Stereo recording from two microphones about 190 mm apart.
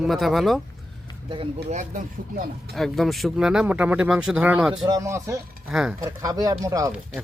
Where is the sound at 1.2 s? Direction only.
25° right (ahead or behind).